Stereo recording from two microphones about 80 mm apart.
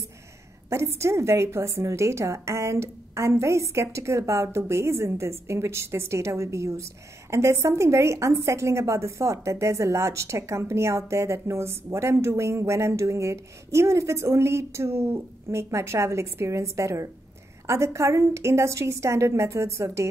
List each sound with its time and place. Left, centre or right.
0.7 s a woman's voice: right